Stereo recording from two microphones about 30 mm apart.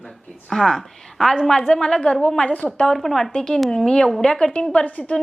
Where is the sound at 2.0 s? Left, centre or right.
Left.